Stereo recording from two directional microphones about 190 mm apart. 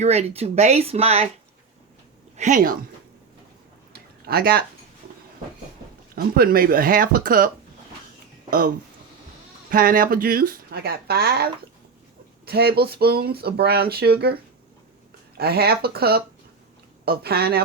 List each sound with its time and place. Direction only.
0.0 s speech: 35° right (ahead or behind)
2.3 s speech: 40° right (ahead or behind)
3.9 s a sound: 55° right (ahead or behind)
6.1 s speech: 50° right (ahead or behind)
15.4 s speech: 55° right (ahead or behind)